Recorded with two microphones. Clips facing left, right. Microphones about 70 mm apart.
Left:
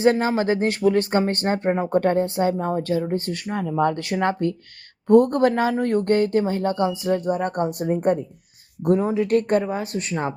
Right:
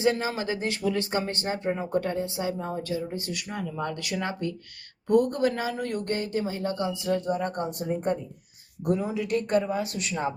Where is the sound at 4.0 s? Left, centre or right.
Left.